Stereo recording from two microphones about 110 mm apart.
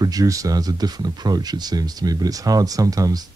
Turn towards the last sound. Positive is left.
turn(degrees=-35)  # may be behind; listen again after turning